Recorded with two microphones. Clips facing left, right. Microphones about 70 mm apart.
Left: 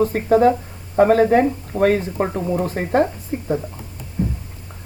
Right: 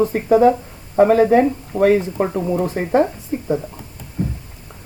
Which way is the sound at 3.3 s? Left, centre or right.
Centre.